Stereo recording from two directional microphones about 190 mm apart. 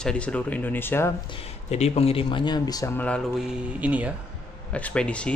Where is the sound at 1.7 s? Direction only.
35° left (ahead or behind); by 3.2 s 10° left (ahead or behind).